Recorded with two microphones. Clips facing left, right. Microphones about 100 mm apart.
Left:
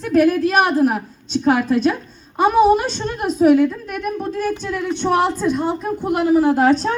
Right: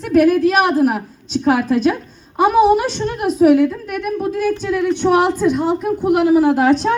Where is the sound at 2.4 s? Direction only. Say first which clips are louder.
Right 1 dB; 15° right (ahead or behind).